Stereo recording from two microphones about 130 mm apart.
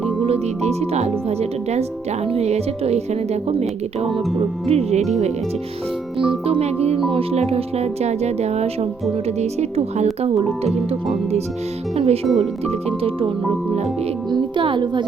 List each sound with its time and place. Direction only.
0.3 s speech: 55° right (ahead or behind)
6.1 s speech: 45° right (ahead or behind)